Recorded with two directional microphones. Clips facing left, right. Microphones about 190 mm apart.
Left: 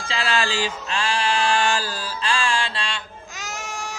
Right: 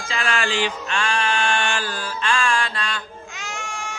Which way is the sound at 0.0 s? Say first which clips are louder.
Left 1 dB; 35° left (ahead or behind).